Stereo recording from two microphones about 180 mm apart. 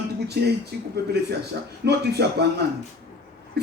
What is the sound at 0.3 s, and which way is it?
Speech, 65° right (ahead or behind).